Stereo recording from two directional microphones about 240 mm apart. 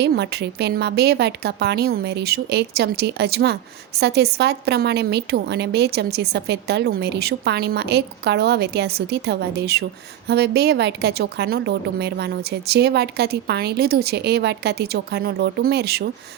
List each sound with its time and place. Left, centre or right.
0.0 s a woman's voice: right